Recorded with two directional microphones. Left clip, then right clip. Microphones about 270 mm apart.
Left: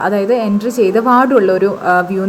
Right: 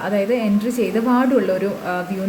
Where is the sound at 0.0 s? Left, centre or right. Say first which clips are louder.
Left 6 dB; centre.